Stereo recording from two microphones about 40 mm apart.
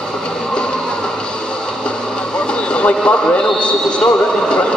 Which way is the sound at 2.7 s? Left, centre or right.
Left.